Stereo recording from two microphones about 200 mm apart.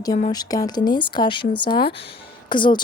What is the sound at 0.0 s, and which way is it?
Speech, 20° left (ahead or behind).